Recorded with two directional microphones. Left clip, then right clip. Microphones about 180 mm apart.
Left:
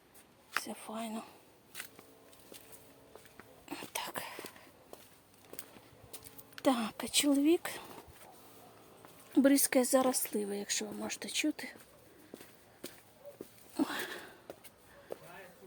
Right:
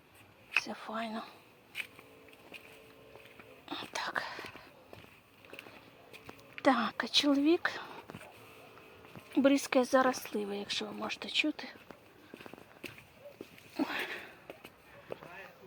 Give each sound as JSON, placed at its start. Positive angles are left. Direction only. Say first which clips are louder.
{"t": 0.6, "sound": "speech", "louder": "right 3 dB", "side_deg": 15}
{"t": 3.7, "sound": "whispering", "louder": "right 4 dB", "side_deg": 20}
{"t": 6.6, "sound": "speech", "louder": "right 3 dB", "side_deg": 15}
{"t": 9.3, "sound": "speech", "louder": "even", "side_deg": 30}
{"t": 13.7, "sound": "a sound", "louder": "right 1 dB", "side_deg": 25}